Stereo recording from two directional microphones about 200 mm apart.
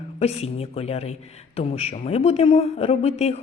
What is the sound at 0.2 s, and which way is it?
A woman's voice, 30° left (ahead or behind).